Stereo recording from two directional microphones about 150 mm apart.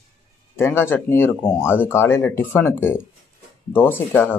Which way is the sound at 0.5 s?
15° left (ahead or behind).